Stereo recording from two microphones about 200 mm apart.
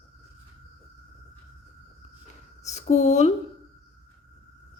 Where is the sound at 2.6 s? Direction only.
35° left (ahead or behind).